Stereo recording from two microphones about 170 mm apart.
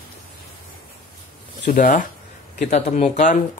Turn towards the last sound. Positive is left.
turn(degrees=45)  # may be behind; listen again after turning